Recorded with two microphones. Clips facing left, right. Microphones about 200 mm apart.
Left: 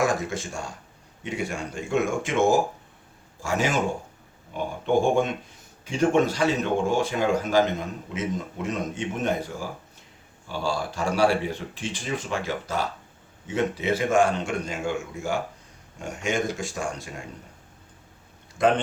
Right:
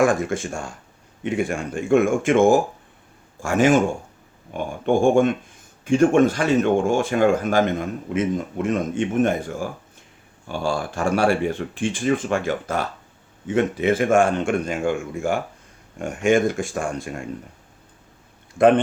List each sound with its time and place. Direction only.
0.0 s speech: 50° right (ahead or behind)